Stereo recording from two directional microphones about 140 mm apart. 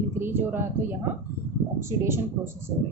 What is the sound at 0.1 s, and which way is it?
Speech, 15° right (ahead or behind).